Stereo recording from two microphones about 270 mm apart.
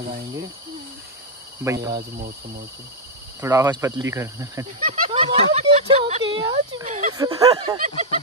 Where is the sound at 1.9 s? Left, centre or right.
Right.